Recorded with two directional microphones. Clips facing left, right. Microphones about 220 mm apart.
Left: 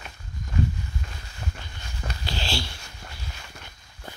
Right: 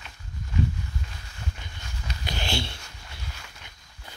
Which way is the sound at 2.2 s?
20° right (ahead or behind).